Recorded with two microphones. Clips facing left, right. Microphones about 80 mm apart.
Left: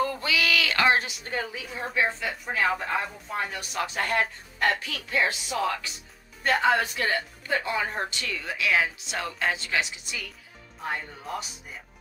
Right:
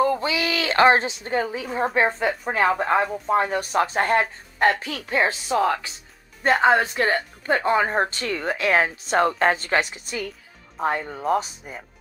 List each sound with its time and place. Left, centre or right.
0.0 s a woman's voice: right